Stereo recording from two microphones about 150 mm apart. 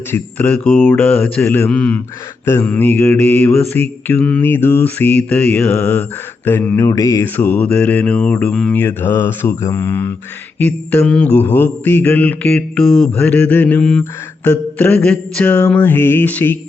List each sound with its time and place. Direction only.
0.1 s mantra: 10° left (ahead or behind)
1.6 s speech: 5° left (ahead or behind)
2.5 s mantra: 10° left (ahead or behind)
7.3 s mantra: 10° left (ahead or behind)